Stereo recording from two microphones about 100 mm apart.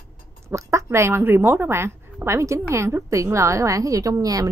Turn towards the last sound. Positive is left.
turn(degrees=-35)  # may be behind; listen again after turning